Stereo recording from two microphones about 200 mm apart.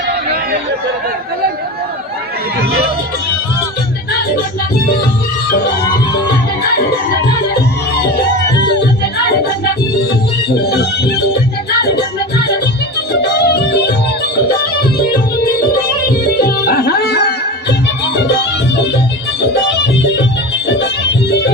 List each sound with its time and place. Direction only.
10.7 s music: 55° left (ahead or behind)
20.7 s music: 60° left (ahead or behind)